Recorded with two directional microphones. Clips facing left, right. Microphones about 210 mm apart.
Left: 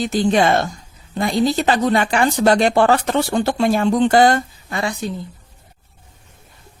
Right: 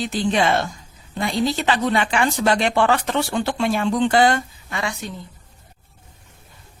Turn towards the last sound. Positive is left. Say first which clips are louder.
# left 5 dB
turn(degrees=35)  # may be behind; listen again after turning